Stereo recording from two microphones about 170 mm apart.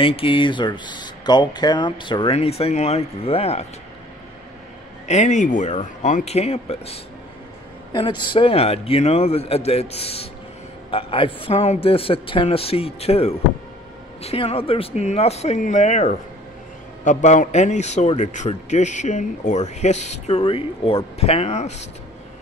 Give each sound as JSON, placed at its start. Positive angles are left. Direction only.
{"t": 0.0, "sound": "speech", "side_deg": 30}
{"t": 5.0, "sound": "a man's voice", "side_deg": 45}